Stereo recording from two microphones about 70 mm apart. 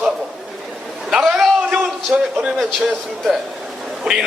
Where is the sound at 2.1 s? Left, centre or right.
Centre.